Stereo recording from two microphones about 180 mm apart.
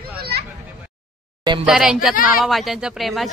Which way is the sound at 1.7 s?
5° right (ahead or behind).